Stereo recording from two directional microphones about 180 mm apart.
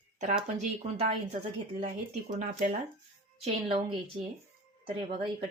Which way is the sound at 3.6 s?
25° right (ahead or behind).